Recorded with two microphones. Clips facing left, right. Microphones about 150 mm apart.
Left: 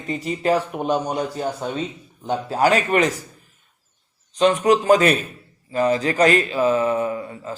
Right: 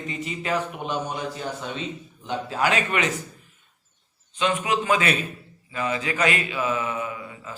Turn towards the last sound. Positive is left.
turn(degrees=40)  # may be behind; listen again after turning